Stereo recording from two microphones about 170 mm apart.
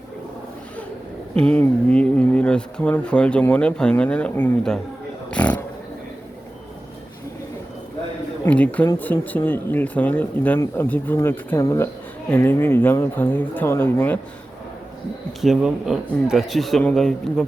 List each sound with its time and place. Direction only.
1.4 s speech: 10° left (ahead or behind)
5.3 s a sound: 10° left (ahead or behind)
8.4 s speech: 10° left (ahead or behind)
15.4 s a man's voice: centre (ahead or behind)